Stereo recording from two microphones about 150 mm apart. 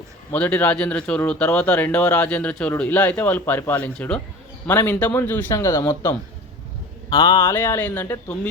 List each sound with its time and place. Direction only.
0.3 s speech: 10° left (ahead or behind)
7.1 s speech: 25° left (ahead or behind)
7.5 s speech: 15° left (ahead or behind)